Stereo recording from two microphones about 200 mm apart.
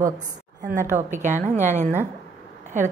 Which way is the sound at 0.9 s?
35° right (ahead or behind).